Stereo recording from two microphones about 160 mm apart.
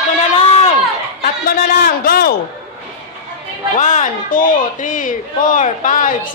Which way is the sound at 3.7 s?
45° left (ahead or behind).